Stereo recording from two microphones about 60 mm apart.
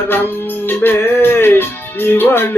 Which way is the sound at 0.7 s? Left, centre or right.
Left.